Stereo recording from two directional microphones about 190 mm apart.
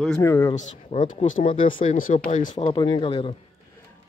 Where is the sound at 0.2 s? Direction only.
15° left (ahead or behind).